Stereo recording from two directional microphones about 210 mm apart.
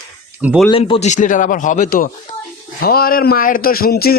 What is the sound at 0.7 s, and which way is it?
A man's voice, 25° left (ahead or behind).